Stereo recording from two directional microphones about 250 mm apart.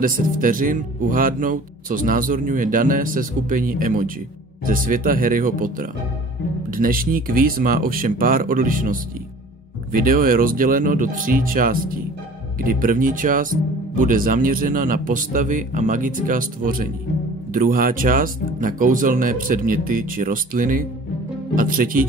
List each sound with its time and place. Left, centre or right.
0.0 s speech: right